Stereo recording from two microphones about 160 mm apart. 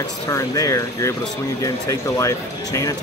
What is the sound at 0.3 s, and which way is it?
Speech, 20° left (ahead or behind).